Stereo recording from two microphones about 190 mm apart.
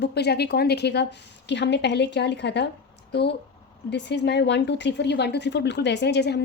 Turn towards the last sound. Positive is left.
turn(degrees=60)  # may be behind; listen again after turning